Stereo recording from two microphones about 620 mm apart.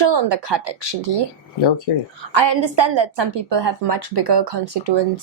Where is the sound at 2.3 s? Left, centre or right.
Right.